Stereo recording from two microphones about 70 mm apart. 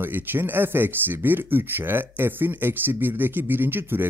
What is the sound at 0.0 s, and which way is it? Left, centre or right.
Speech, right.